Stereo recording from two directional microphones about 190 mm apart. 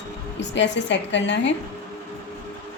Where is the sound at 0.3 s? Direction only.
70° left (ahead or behind).